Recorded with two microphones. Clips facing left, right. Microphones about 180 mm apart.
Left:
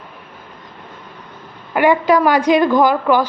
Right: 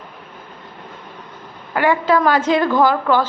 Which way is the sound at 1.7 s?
15° left (ahead or behind).